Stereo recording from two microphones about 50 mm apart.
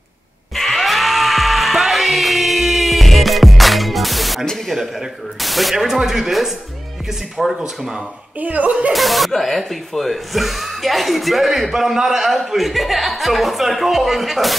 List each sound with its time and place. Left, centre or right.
0.6 s music: centre
4.5 s speech: centre
8.4 s speech: right
8.9 s speech: centre